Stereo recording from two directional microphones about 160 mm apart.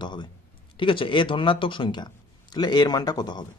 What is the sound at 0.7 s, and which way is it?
A man's voice, 30° left (ahead or behind).